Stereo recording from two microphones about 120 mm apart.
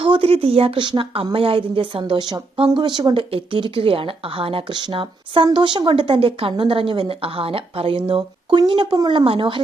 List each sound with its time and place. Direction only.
0.0 s speech: 50° right (ahead or behind)